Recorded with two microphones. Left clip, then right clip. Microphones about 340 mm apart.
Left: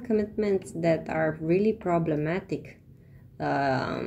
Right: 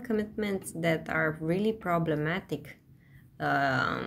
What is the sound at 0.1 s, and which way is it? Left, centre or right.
A woman's voice, right.